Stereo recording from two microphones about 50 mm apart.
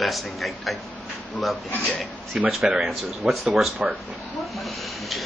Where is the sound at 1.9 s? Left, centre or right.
Centre.